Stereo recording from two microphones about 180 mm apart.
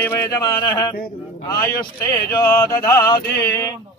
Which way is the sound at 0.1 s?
20° left (ahead or behind).